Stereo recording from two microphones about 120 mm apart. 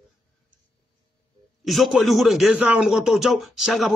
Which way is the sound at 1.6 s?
Centre (ahead or behind).